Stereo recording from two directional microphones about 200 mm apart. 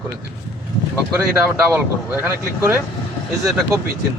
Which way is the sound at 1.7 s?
10° right (ahead or behind).